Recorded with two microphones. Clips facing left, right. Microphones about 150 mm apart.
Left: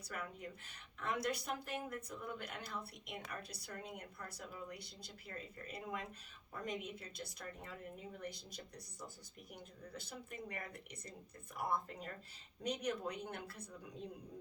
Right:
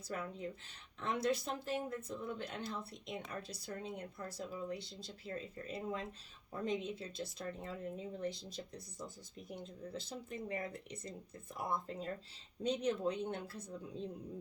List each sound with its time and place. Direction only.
0.1 s speech: 25° right (ahead or behind)